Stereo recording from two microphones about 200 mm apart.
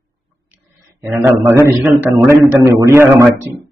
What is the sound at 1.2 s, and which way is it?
A man's voice, 10° right (ahead or behind).